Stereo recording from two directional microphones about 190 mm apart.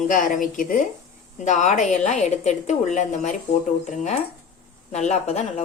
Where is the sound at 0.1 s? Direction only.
45° left (ahead or behind).